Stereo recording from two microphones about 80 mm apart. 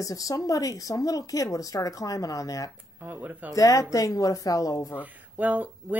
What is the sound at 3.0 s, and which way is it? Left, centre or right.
Speech, right.